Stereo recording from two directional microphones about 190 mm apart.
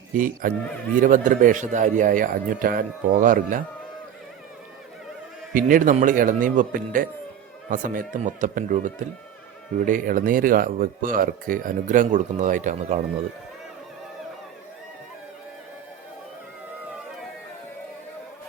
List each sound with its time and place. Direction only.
0.1 s speech: 45° right (ahead or behind)
5.5 s speech: 45° right (ahead or behind)